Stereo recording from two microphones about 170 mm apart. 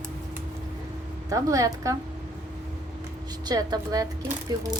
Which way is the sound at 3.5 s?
20° right (ahead or behind).